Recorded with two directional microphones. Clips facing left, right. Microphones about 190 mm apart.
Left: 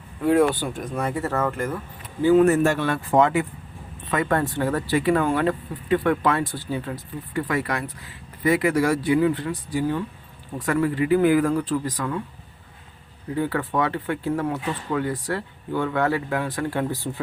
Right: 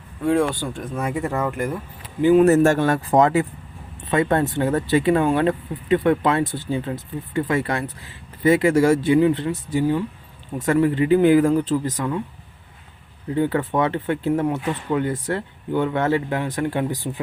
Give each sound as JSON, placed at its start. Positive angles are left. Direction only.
{"t": 0.3, "sound": "speech", "side_deg": 5}
{"t": 1.1, "sound": "speech", "side_deg": -15}
{"t": 2.5, "sound": "speech", "side_deg": -45}
{"t": 4.1, "sound": "speech", "side_deg": -25}
{"t": 13.3, "sound": "speech", "side_deg": -25}